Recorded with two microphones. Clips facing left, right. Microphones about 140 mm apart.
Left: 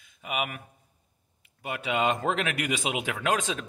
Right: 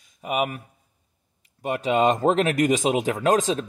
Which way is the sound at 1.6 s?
40° right (ahead or behind).